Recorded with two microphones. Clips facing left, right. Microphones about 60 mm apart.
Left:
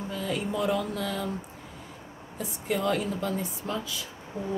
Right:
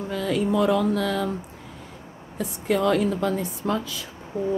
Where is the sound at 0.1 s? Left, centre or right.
Right.